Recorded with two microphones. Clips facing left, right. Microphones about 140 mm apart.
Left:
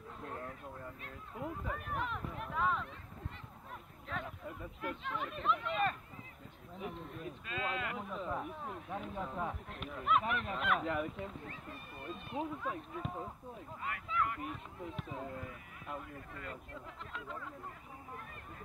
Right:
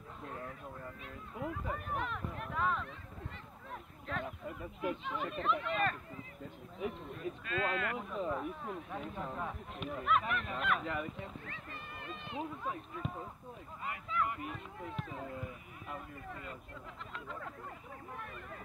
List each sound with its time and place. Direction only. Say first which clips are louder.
0.2 s a sound: even; 5° right (ahead or behind)
1.0 s speech: right 2 dB; centre (ahead or behind)
4.1 s speech: right 2 dB; centre (ahead or behind)
11.4 s speech: even; 90° right
12.4 s speech: left 1 dB; centre (ahead or behind)